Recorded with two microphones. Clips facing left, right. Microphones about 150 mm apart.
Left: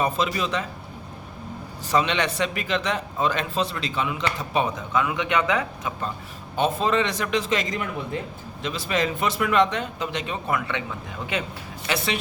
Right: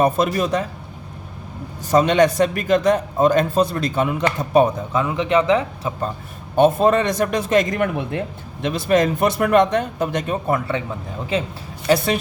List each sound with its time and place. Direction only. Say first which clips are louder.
0.0 s a man's voice: right 6 dB; 45° right (ahead or behind)
1.9 s a man's voice: right 8 dB; 45° right (ahead or behind)
6.6 s a man's voice: right 8 dB; 50° right (ahead or behind); by 11.5 s 30° right (ahead or behind)
11.9 s a man's voice: right 10 dB; 40° right (ahead or behind)